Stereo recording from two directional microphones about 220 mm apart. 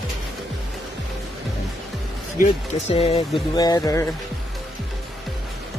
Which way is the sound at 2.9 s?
25° left (ahead or behind).